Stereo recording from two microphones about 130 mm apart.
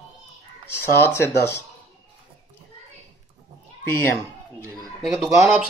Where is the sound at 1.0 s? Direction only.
20° left (ahead or behind).